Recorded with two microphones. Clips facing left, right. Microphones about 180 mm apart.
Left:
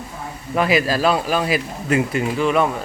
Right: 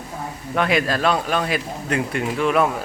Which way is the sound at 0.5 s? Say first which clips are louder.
Left 2 dB; 5° left (ahead or behind).